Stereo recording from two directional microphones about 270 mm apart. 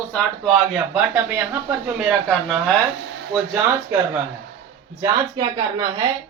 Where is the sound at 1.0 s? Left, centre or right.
Centre.